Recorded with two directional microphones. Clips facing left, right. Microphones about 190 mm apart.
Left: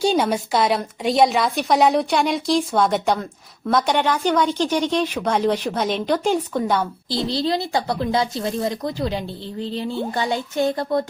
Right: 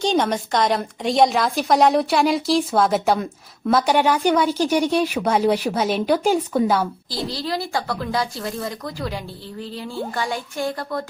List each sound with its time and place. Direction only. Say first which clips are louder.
0.0 s a woman's voice: left 1 dB; 10° left (ahead or behind)
7.3 s speech: left 4 dB; 25° left (ahead or behind)